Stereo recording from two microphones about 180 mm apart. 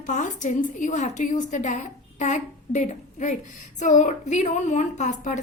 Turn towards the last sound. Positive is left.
turn(degrees=40)  # may be behind; listen again after turning